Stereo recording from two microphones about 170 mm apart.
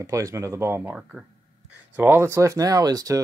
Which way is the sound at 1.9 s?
10° right (ahead or behind).